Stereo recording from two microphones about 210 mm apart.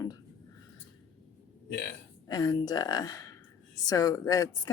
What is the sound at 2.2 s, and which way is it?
A woman's voice, 20° left (ahead or behind).